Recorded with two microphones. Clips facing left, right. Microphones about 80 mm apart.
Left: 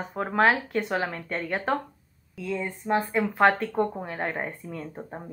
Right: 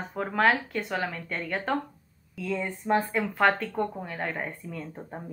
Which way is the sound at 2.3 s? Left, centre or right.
Centre.